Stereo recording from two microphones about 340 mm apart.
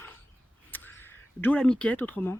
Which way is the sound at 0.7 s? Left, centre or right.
Centre.